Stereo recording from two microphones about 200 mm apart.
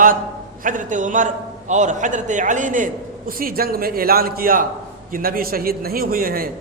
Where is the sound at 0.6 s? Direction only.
40° right (ahead or behind).